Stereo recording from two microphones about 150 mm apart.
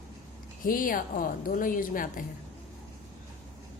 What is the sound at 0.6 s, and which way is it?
A woman's voice, 65° left (ahead or behind).